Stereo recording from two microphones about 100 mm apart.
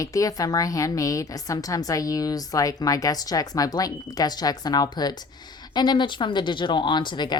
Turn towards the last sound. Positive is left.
turn(degrees=50)  # may be behind; listen again after turning